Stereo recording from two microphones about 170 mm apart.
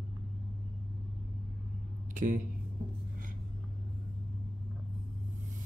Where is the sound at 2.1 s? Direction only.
50° right (ahead or behind).